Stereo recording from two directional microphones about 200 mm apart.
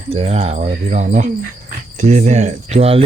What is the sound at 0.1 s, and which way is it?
Speech, 30° right (ahead or behind).